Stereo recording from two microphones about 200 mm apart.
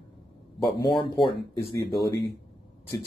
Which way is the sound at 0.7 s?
20° left (ahead or behind).